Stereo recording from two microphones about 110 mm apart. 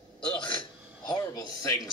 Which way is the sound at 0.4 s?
45° left (ahead or behind).